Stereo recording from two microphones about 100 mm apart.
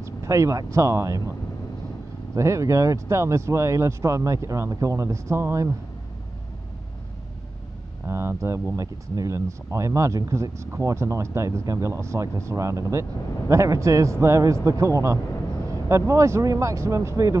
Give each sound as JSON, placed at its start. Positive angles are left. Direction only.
{"t": 0.0, "sound": "speech", "side_deg": -30}
{"t": 2.3, "sound": "speech", "side_deg": -30}
{"t": 8.1, "sound": "speech", "side_deg": -25}